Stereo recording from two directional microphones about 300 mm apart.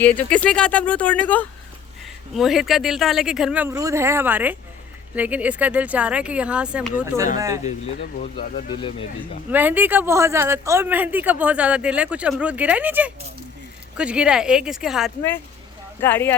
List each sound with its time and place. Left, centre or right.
0.0 s a man's voice: centre
8.4 s speech: centre
9.5 s a man's voice: centre